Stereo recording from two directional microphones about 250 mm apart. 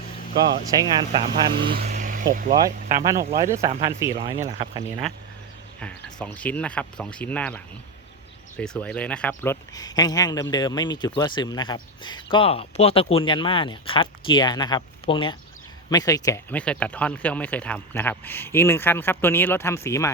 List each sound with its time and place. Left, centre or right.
0.7 s speech: centre
1.7 s vehicle: right
2.5 s speech: centre
5.8 s speech: centre